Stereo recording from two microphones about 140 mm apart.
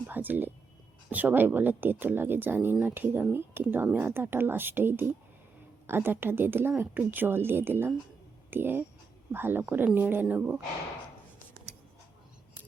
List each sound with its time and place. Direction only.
0.1 s speech: 15° right (ahead or behind)